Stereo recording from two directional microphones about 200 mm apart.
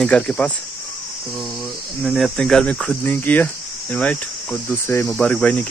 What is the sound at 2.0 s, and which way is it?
Speech, centre (ahead or behind).